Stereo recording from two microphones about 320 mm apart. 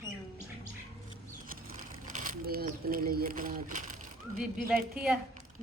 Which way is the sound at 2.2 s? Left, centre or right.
Right.